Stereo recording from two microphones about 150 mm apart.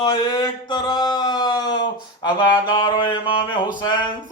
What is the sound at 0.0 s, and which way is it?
Mantra, 30° left (ahead or behind).